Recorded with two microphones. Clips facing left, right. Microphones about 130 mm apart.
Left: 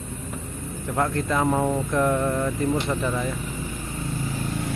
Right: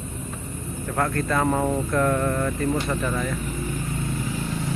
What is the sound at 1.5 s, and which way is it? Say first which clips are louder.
Speech: even; 5° left (ahead or behind).